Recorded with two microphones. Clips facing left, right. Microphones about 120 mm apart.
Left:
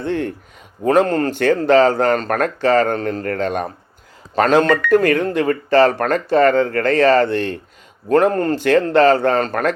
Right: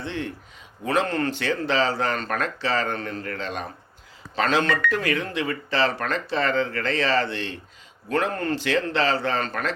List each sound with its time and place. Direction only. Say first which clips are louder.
0.0 s speech: left 9 dB; 50° left (ahead or behind)